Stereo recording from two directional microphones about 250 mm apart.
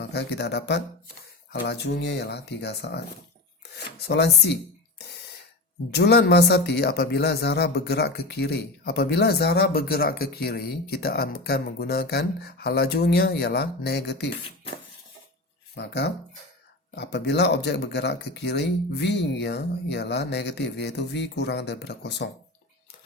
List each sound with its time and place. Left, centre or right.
0.0 s speech: left
5.9 s speech: left
15.7 s speech: left